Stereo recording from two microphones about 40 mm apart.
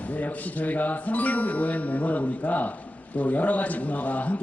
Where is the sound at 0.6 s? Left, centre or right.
Left.